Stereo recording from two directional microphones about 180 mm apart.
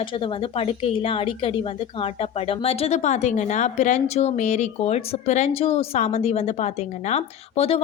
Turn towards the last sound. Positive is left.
turn(degrees=35)  # may be behind; listen again after turning